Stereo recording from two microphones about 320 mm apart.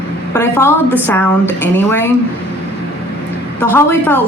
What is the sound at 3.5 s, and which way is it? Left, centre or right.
Speech, centre.